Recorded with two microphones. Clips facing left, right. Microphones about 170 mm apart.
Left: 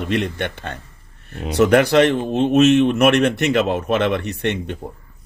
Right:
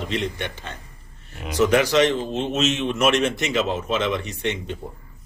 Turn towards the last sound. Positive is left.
turn(degrees=60)  # may be behind; listen again after turning